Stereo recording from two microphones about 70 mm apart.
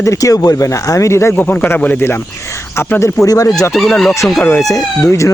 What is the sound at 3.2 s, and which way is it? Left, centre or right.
Speech, left.